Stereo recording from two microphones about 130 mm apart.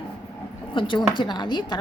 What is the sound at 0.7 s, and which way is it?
A woman's voice, 40° left (ahead or behind).